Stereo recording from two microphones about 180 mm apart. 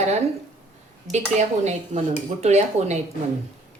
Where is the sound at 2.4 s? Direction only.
40° right (ahead or behind).